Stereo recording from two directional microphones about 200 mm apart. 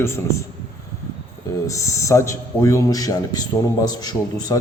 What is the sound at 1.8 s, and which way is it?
A man's voice, 15° left (ahead or behind).